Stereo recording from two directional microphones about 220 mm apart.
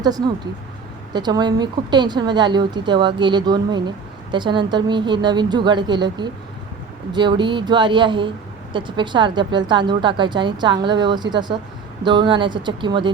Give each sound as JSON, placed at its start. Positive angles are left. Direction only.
{"t": 0.0, "sound": "speech", "side_deg": -15}